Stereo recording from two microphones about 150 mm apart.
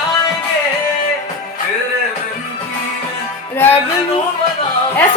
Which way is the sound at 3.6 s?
15° left (ahead or behind).